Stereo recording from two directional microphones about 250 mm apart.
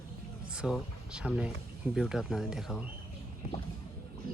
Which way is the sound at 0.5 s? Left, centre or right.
Centre.